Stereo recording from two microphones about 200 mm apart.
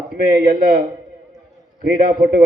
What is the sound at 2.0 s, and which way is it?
Speech, 45° right (ahead or behind).